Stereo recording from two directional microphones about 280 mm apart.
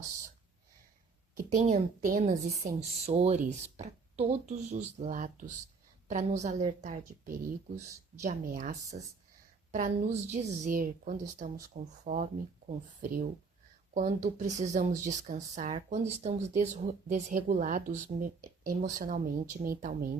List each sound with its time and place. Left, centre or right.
1.4 s speech: right
14.3 s speech: right